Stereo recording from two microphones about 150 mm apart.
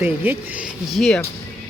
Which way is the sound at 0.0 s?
15° right (ahead or behind).